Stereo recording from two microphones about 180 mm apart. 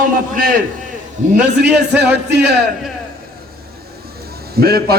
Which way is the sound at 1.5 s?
65° right (ahead or behind).